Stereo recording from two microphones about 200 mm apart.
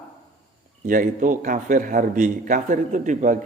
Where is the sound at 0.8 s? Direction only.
45° right (ahead or behind).